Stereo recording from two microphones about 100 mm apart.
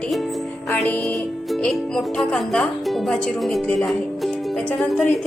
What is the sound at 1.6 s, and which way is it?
Speech, 5° left (ahead or behind).